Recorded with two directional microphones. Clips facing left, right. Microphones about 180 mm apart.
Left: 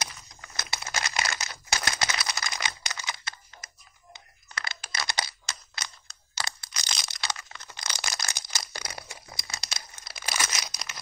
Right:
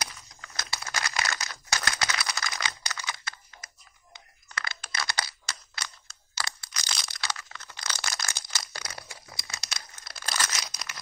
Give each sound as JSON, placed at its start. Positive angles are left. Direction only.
{"t": 0.0, "sound": "crumpling", "side_deg": 20}
{"t": 4.6, "sound": "a sound", "side_deg": 20}
{"t": 10.0, "sound": "crumpling", "side_deg": 10}